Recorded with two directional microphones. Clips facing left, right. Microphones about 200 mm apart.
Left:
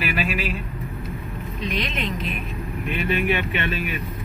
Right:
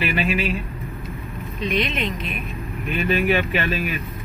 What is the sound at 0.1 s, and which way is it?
Speech, 5° left (ahead or behind).